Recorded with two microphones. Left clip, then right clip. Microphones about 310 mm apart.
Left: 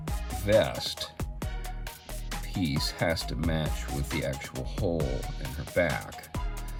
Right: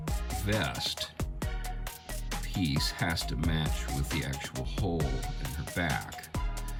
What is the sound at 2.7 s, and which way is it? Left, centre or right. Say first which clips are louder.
Speech: left 4 dB; centre.